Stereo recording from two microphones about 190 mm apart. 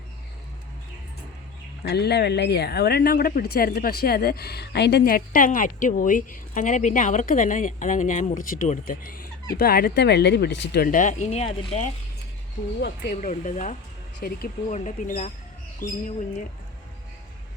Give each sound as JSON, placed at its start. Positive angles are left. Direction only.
{"t": 1.8, "sound": "speech", "side_deg": 60}
{"t": 12.8, "sound": "speech", "side_deg": 60}
{"t": 13.2, "sound": "speech", "side_deg": 40}
{"t": 14.2, "sound": "speech", "side_deg": 55}
{"t": 14.7, "sound": "speech", "side_deg": 40}